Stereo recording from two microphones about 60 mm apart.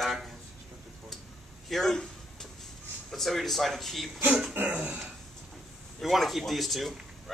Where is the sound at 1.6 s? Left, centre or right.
Centre.